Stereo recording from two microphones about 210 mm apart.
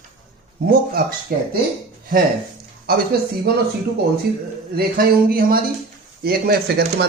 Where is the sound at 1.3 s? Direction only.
45° right (ahead or behind).